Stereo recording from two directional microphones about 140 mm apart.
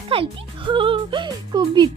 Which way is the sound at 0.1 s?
40° right (ahead or behind).